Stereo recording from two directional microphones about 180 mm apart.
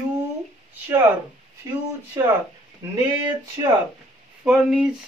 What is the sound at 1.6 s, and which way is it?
Speech, 20° right (ahead or behind).